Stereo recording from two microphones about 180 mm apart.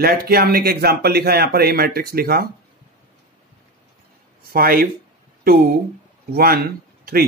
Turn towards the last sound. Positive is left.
turn(degrees=-55)  # may be behind; listen again after turning